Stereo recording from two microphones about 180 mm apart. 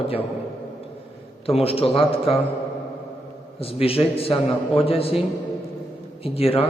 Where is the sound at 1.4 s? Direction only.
30° left (ahead or behind).